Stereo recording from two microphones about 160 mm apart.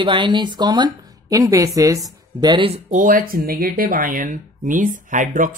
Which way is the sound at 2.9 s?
60° right (ahead or behind).